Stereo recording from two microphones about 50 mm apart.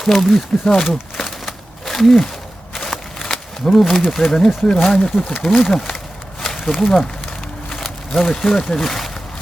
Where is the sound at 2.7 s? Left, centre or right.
Centre.